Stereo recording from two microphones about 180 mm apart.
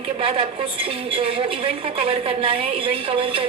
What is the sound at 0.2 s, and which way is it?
A woman's voice, 30° right (ahead or behind).